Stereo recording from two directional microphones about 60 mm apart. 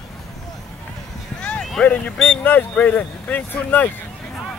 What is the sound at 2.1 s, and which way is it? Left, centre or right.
Speech, centre.